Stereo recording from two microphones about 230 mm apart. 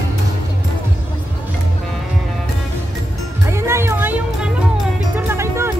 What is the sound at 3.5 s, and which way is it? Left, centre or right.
Music, centre.